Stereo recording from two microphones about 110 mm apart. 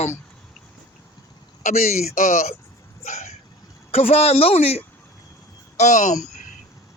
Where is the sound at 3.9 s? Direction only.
65° left (ahead or behind).